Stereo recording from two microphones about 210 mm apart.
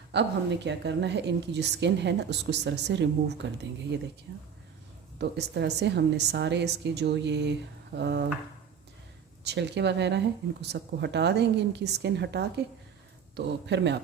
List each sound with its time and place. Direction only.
0.1 s a woman's voice: 55° right (ahead or behind)
9.4 s a woman's voice: 55° right (ahead or behind)